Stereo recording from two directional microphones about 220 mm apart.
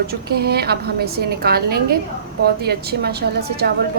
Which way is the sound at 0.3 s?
45° right (ahead or behind).